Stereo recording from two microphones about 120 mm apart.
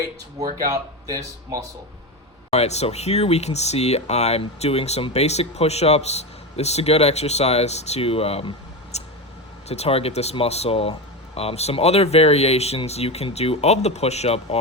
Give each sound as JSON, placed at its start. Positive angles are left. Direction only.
{"t": 0.0, "sound": "speech", "side_deg": -30}
{"t": 2.5, "sound": "speech", "side_deg": 65}